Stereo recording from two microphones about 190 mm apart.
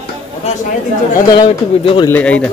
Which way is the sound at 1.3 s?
25° left (ahead or behind).